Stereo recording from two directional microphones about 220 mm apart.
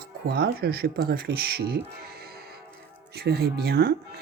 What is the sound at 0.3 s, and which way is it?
Speech, 45° right (ahead or behind).